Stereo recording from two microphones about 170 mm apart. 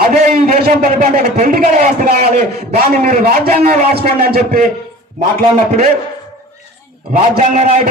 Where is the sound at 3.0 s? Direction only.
55° right (ahead or behind).